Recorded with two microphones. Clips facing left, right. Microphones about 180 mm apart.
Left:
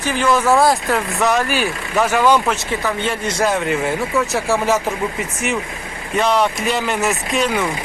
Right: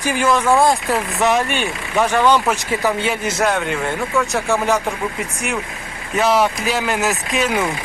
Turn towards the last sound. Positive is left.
turn(degrees=0)  # may be behind; listen again after turning